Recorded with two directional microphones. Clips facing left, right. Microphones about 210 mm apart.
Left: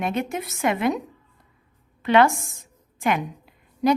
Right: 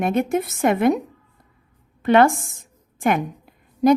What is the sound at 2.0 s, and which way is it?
Speech, 50° right (ahead or behind).